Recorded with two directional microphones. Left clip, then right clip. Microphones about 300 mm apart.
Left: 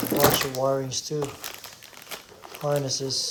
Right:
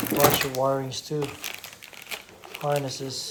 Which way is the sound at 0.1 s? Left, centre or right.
Centre.